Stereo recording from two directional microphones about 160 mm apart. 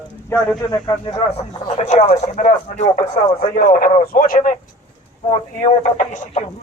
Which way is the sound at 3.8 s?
65° left (ahead or behind).